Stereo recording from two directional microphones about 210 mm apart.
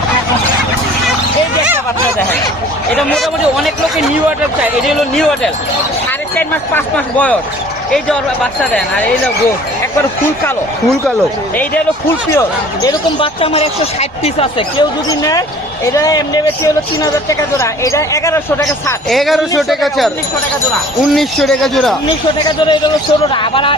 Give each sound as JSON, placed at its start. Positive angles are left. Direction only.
{"t": 2.9, "sound": "speech", "side_deg": 5}
{"t": 11.5, "sound": "speech", "side_deg": 10}
{"t": 19.1, "sound": "speech", "side_deg": 0}
{"t": 22.4, "sound": "speech", "side_deg": 25}